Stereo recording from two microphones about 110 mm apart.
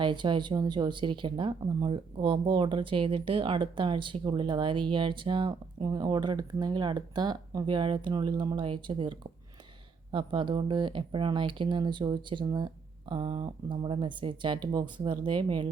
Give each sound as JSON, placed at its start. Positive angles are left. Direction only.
{"t": 0.0, "sound": "speech", "side_deg": -45}